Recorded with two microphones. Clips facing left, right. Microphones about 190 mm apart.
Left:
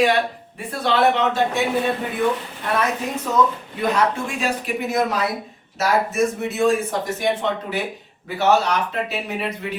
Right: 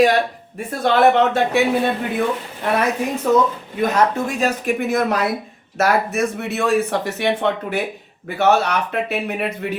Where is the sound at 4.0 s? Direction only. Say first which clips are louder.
Right 4 dB; 40° right (ahead or behind).